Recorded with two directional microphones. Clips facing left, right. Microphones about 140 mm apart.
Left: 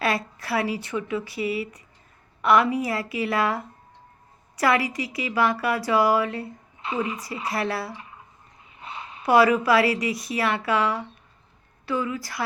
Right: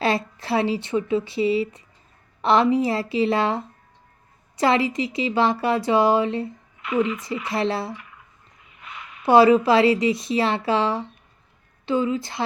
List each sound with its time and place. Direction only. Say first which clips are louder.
0.0 s speech: right 3 dB; 25° right (ahead or behind)
6.8 s a woman's voice: right 5 dB; 30° left (ahead or behind)
7.5 s speech: right 4 dB; 25° right (ahead or behind)
7.9 s a sound: left 1 dB; 30° left (ahead or behind)
9.2 s speech: right 4 dB; 25° right (ahead or behind)